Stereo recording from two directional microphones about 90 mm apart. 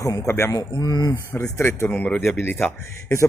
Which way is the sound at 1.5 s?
25° left (ahead or behind).